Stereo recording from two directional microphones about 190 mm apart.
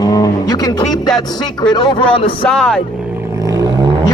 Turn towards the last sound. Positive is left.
turn(degrees=-20)  # may be behind; listen again after turning